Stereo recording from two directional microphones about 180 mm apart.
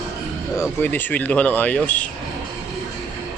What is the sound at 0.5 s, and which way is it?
Speech, 15° left (ahead or behind).